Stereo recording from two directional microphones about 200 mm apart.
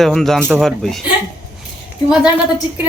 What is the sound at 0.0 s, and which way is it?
Speech, centre (ahead or behind).